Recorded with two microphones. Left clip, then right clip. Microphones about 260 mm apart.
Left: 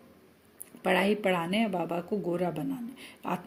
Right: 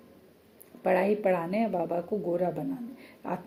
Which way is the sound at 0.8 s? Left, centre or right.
Left.